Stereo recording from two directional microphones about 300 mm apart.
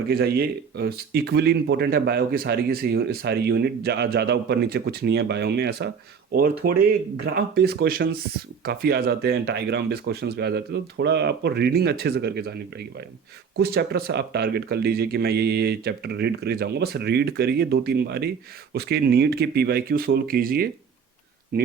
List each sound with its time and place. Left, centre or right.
0.1 s speech: right